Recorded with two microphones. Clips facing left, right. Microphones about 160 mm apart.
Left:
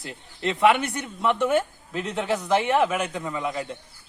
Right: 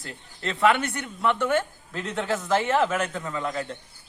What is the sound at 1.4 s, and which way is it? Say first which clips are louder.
A man's voice: left 2 dB; 20° left (ahead or behind).